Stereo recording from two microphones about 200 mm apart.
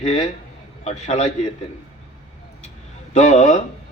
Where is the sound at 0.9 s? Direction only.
35° left (ahead or behind).